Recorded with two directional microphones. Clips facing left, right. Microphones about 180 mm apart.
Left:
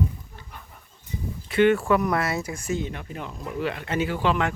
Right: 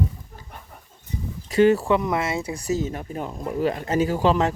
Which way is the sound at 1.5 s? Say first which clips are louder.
Right 2 dB; 35° right (ahead or behind).